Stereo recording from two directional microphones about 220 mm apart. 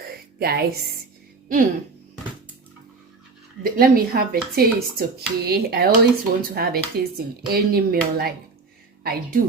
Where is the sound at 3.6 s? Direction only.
40° right (ahead or behind).